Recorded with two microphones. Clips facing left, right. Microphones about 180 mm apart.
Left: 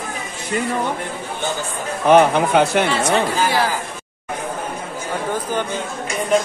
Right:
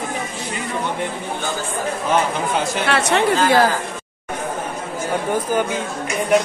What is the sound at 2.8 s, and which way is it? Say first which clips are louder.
Speech: even; 65° right (ahead or behind).